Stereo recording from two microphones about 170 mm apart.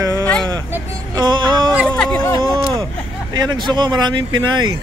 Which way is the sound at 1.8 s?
5° left (ahead or behind).